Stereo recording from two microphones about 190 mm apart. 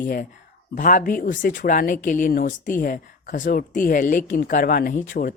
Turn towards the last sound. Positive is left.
turn(degrees=45)  # may be behind; listen again after turning